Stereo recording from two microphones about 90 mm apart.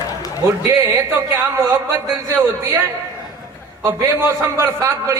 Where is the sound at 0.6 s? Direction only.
35° right (ahead or behind).